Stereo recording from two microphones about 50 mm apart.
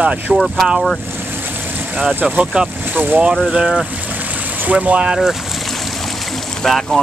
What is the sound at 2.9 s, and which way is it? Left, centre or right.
Speech, right.